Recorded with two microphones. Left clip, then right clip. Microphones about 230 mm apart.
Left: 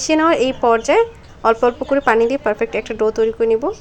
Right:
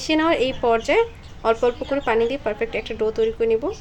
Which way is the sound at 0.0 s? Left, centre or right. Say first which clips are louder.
Left 5 dB; centre.